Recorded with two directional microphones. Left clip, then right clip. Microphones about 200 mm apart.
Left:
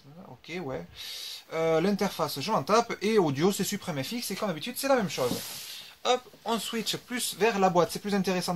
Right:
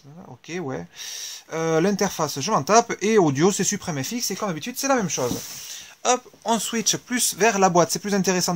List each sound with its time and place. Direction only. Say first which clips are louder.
0.5 s speech: right 5 dB; 50° right (ahead or behind)